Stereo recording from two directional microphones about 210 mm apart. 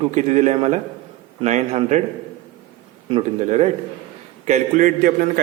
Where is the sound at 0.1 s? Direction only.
35° right (ahead or behind).